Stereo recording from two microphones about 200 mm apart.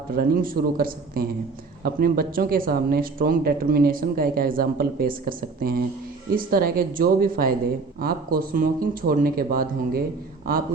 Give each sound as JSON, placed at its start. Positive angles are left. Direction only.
{"t": 0.1, "sound": "speech", "side_deg": -45}